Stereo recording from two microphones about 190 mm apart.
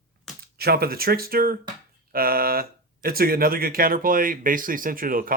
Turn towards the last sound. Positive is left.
turn(degrees=-50)  # may be behind; listen again after turning